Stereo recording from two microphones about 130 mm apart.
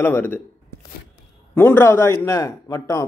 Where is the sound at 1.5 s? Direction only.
15° left (ahead or behind).